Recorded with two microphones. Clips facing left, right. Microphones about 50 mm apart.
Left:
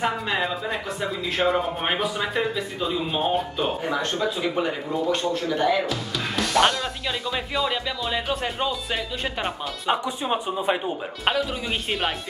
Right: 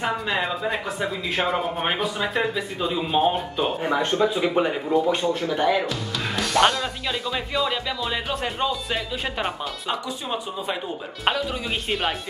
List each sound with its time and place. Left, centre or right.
0.0 s speech: centre
3.8 s speech: centre
5.9 s speech: centre
9.8 s speech: left
11.3 s speech: centre